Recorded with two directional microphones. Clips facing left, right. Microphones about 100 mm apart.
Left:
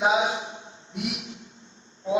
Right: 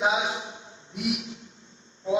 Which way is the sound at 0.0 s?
30° left (ahead or behind).